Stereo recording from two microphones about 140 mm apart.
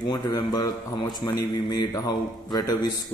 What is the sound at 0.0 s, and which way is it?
A man's voice, 30° left (ahead or behind).